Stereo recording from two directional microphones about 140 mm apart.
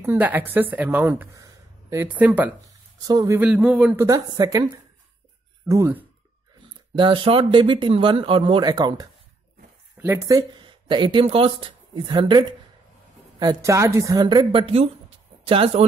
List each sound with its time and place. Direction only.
0.0 s a woman's voice: 15° right (ahead or behind)
2.2 s speech: 10° right (ahead or behind)
3.0 s speech: 25° right (ahead or behind)
3.3 s speech: 10° right (ahead or behind); by 4.6 s 25° right (ahead or behind)
5.7 s speech: 20° right (ahead or behind)
7.0 s a woman's voice: 35° right (ahead or behind)